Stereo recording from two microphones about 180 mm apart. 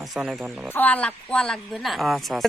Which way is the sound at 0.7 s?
10° left (ahead or behind).